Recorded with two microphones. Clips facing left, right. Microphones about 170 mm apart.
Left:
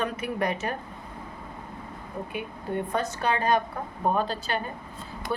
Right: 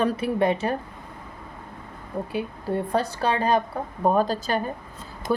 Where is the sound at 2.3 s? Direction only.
35° right (ahead or behind).